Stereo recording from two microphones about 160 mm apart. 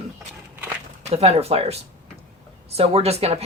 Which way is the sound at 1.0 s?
40° right (ahead or behind).